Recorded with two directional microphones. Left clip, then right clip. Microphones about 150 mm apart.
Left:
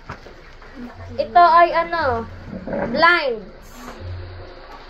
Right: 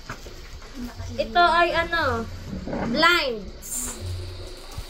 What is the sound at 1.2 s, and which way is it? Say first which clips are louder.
Speech: left 7 dB; 40° right (ahead or behind).